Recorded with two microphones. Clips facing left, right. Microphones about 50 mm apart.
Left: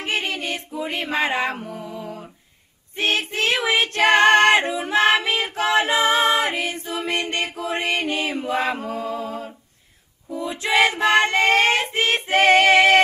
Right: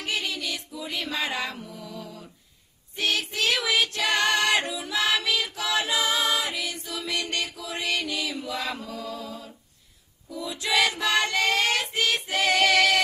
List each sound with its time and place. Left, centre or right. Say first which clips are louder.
0.0 s music: left 5 dB; left
3.0 s child singing: left 5 dB; left